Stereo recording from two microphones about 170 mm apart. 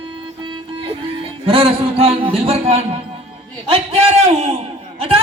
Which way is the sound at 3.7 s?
35° right (ahead or behind).